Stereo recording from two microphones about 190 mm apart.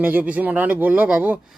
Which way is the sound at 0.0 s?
10° right (ahead or behind).